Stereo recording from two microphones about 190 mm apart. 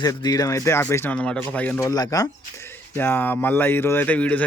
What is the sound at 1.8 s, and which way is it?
Speech, 20° left (ahead or behind).